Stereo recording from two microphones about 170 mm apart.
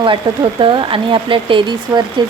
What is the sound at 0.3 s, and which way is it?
Speech, 30° right (ahead or behind).